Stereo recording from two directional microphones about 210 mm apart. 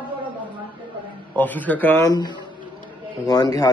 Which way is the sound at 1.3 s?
10° left (ahead or behind).